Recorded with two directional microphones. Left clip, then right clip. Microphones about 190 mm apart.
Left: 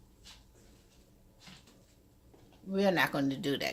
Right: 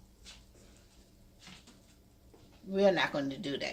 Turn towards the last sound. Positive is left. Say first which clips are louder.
# left 4 dB
turn(degrees=55)  # may be behind; listen again after turning